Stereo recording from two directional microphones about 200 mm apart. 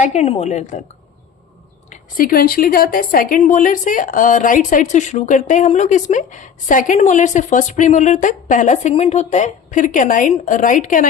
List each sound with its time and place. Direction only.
0.0 s a woman's voice: 35° left (ahead or behind)
1.9 s a woman's voice: 45° left (ahead or behind)